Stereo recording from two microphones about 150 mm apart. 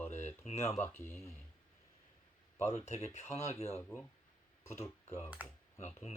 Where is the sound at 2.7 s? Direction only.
45° left (ahead or behind).